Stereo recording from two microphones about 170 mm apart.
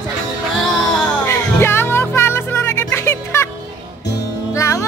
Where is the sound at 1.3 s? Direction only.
15° left (ahead or behind).